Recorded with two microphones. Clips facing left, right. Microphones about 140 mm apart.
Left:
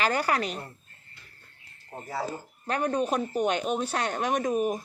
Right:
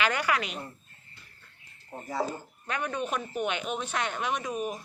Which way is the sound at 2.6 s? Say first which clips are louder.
Left 5 dB; 40° left (ahead or behind).